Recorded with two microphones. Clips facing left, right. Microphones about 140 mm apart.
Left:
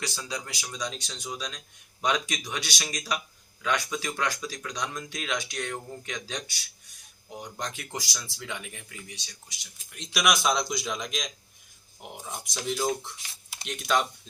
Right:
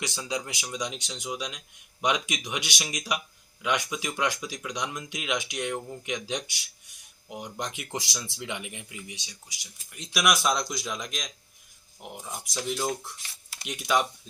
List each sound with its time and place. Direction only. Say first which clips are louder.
0.0 s speech: right 3 dB; 20° right (ahead or behind)
9.9 s speech: even; 5° right (ahead or behind)
12.3 s speech: even; centre (ahead or behind)